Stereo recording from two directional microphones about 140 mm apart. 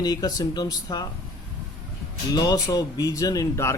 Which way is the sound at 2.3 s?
25° left (ahead or behind).